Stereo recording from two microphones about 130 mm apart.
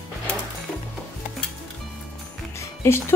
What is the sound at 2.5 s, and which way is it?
Music, 20° left (ahead or behind).